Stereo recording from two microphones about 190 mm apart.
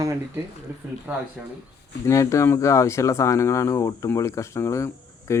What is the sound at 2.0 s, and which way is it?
Speech, 15° left (ahead or behind).